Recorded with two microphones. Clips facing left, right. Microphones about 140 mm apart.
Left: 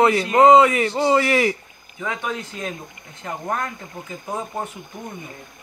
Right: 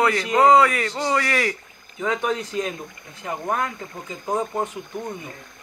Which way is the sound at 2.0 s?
20° right (ahead or behind).